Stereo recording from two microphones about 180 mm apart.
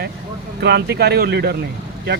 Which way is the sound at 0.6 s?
65° right (ahead or behind).